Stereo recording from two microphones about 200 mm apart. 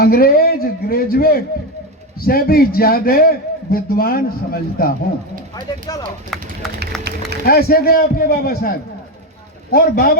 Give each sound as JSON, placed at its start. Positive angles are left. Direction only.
{"t": 0.0, "sound": "a man's voice", "side_deg": 50}
{"t": 5.5, "sound": "speech", "side_deg": 20}
{"t": 6.9, "sound": "speech", "side_deg": 0}
{"t": 7.4, "sound": "a man's voice", "side_deg": 50}
{"t": 9.7, "sound": "a man's voice", "side_deg": 50}